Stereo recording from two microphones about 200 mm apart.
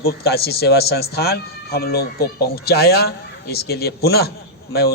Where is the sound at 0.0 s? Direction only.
50° left (ahead or behind).